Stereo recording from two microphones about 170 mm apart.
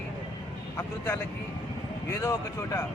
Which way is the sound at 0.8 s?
15° left (ahead or behind).